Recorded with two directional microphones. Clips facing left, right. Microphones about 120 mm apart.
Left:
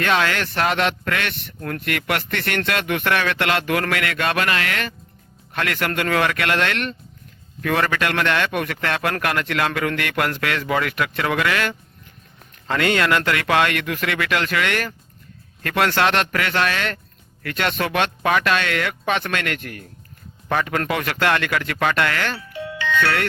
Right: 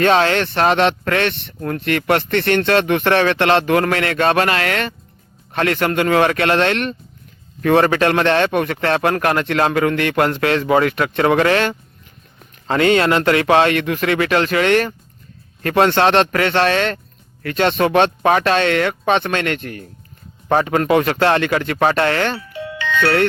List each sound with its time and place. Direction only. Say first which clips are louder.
0.0 s a man's voice: right 6 dB; 35° right (ahead or behind)
20.7 s a man's voice: right 8 dB; 25° right (ahead or behind)